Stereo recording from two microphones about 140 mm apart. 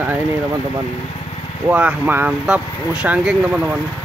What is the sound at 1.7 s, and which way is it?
Speech, 10° right (ahead or behind).